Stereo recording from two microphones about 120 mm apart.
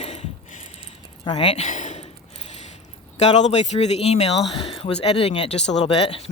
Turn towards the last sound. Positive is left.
turn(degrees=50)  # may be behind; listen again after turning